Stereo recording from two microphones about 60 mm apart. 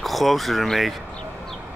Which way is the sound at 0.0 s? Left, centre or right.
Centre.